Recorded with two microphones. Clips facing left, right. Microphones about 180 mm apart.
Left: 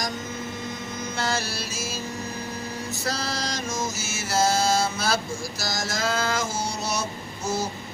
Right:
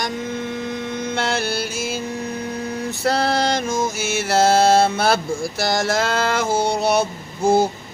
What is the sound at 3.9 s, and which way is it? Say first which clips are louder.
Mantra: right 8 dB; 60° right (ahead or behind).